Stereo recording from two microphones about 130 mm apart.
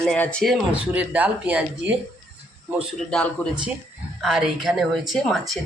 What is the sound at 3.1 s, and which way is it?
Speech, 10° left (ahead or behind).